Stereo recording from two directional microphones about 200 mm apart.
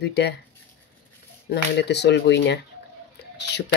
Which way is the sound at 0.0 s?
60° left (ahead or behind).